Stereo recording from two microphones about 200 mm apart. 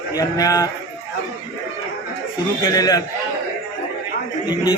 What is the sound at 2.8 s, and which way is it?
Speech, 20° left (ahead or behind).